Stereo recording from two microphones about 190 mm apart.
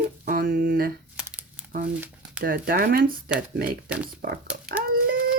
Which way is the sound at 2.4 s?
55° right (ahead or behind).